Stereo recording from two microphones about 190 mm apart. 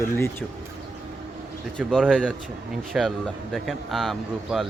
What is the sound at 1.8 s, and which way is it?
A man's voice, centre (ahead or behind).